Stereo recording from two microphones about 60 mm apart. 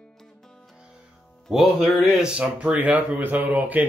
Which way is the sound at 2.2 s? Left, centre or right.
Centre.